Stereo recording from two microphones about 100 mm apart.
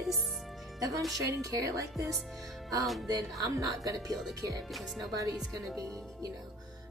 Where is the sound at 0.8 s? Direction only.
35° right (ahead or behind).